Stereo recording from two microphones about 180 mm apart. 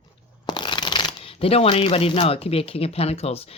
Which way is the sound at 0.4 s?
25° left (ahead or behind).